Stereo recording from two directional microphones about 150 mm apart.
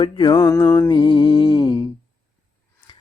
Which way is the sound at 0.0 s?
30° left (ahead or behind).